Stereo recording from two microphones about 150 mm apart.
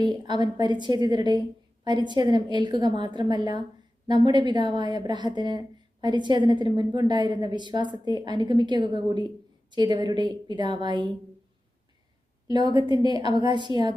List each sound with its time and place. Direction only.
0.0 s speech: 30° right (ahead or behind)
12.5 s speech: 30° right (ahead or behind)